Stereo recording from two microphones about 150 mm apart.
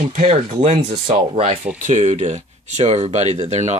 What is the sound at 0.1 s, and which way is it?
Speech, 50° right (ahead or behind).